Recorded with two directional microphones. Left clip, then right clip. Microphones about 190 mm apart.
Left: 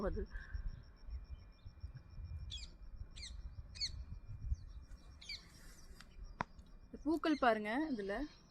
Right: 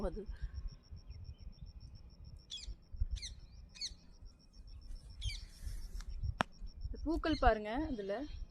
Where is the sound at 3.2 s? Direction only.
50° right (ahead or behind).